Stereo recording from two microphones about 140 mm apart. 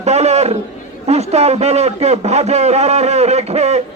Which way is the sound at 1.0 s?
50° right (ahead or behind).